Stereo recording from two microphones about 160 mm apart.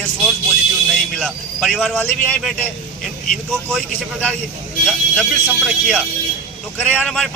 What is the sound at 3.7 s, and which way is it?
Speech, 5° left (ahead or behind).